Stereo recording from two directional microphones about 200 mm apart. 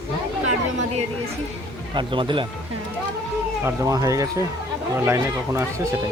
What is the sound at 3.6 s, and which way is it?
Speech, 15° right (ahead or behind).